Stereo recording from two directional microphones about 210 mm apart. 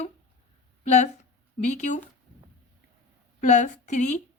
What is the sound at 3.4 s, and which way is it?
Speech, 35° left (ahead or behind).